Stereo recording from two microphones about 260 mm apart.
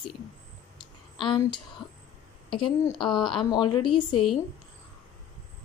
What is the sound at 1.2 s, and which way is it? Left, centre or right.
Speech, centre.